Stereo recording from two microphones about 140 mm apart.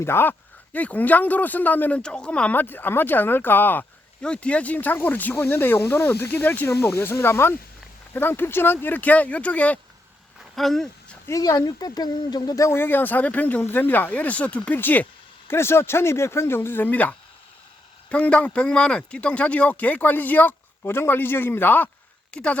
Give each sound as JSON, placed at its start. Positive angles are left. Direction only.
{"t": 0.0, "sound": "speech", "side_deg": 15}
{"t": 10.5, "sound": "a sound", "side_deg": 0}
{"t": 11.3, "sound": "speech", "side_deg": 25}